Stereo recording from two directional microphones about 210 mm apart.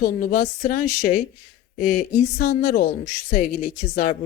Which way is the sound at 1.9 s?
45° left (ahead or behind).